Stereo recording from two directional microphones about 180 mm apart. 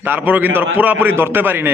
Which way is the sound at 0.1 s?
10° right (ahead or behind).